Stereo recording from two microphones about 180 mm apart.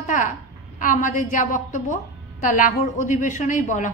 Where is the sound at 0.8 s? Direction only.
45° left (ahead or behind).